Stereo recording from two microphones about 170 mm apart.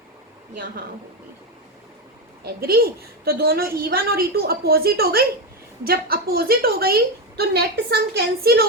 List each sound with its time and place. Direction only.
2.4 s a woman's voice: 60° right (ahead or behind)